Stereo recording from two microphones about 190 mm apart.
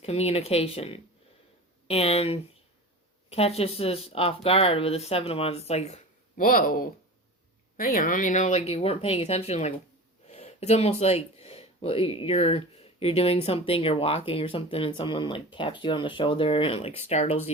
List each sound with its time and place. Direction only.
0.0 s speech: 35° left (ahead or behind)